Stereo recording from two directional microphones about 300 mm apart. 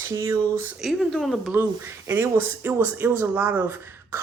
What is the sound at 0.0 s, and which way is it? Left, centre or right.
Speech, centre.